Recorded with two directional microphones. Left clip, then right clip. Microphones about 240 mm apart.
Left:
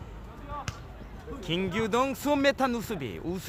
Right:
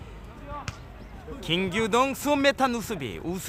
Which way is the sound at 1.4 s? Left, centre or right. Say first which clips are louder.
Right 4 dB; centre.